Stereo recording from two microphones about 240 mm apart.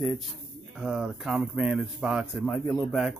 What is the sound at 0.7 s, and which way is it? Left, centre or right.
Speech, centre.